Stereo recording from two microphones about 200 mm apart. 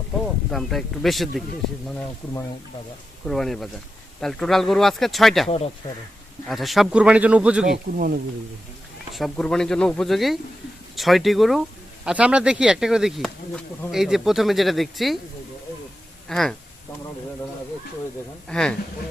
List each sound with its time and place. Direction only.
0.5 s speech: centre (ahead or behind)
3.2 s speech: centre (ahead or behind)
5.5 s speech: 30° left (ahead or behind)
6.5 s speech: centre (ahead or behind)
7.9 s speech: 45° right (ahead or behind)
9.1 s speech: centre (ahead or behind)
16.3 s speech: centre (ahead or behind)
18.4 s speech: 5° left (ahead or behind)